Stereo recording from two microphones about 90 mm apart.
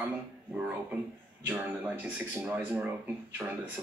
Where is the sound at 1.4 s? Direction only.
20° right (ahead or behind).